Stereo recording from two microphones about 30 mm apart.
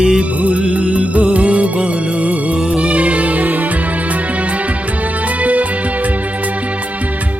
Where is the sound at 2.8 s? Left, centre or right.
Right.